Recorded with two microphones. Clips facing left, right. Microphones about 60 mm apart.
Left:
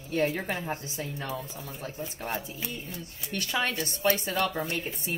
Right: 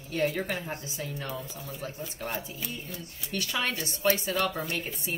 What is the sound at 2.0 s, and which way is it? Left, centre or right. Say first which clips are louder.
A woman's voice: left 1 dB; left.